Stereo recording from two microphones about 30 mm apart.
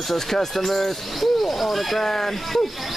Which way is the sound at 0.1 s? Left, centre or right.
Centre.